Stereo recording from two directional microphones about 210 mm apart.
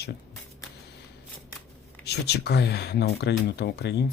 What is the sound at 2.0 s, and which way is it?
Speech, 50° left (ahead or behind).